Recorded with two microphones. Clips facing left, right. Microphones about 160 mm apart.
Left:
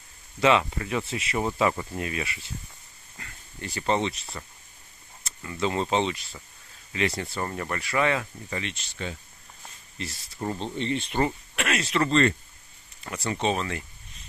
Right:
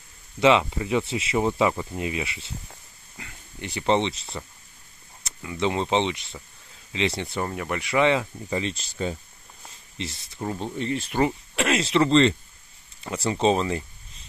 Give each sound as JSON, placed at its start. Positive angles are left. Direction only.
{"t": 0.4, "sound": "speech", "side_deg": -25}
{"t": 3.2, "sound": "a sound", "side_deg": -15}
{"t": 4.4, "sound": "speech", "side_deg": -10}
{"t": 7.4, "sound": "speech", "side_deg": -10}
{"t": 8.6, "sound": "speech", "side_deg": -35}
{"t": 9.9, "sound": "speech", "side_deg": -25}
{"t": 10.4, "sound": "speech", "side_deg": -5}
{"t": 11.5, "sound": "speech", "side_deg": -25}